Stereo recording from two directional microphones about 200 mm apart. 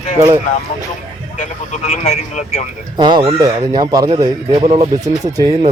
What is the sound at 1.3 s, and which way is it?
Speech, 35° left (ahead or behind).